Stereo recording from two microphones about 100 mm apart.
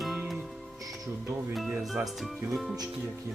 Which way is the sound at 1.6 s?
5° right (ahead or behind).